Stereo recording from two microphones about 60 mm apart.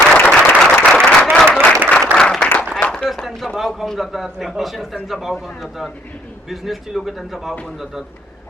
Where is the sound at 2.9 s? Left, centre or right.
Centre.